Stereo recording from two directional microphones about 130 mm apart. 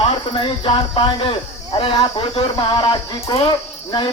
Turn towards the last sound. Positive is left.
turn(degrees=35)  # may be behind; listen again after turning